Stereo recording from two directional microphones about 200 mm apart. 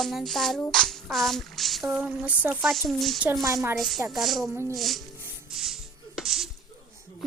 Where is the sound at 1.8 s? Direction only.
5° right (ahead or behind).